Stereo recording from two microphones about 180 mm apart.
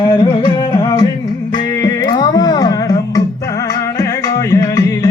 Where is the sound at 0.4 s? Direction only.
25° left (ahead or behind).